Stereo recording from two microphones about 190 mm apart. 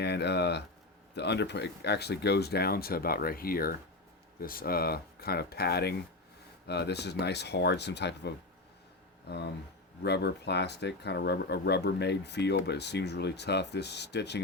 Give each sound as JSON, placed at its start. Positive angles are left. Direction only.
{"t": 0.0, "sound": "speech", "side_deg": 60}
{"t": 10.0, "sound": "speech", "side_deg": 60}